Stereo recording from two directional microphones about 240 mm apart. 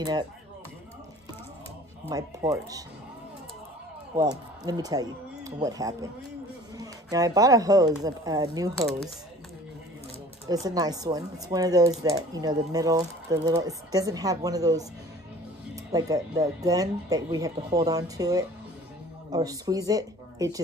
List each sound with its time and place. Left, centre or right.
0.0 s speech: centre
2.0 s speech: centre
4.2 s speech: centre
10.5 s speech: centre